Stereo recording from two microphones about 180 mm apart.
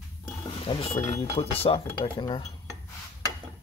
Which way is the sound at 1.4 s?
30° left (ahead or behind).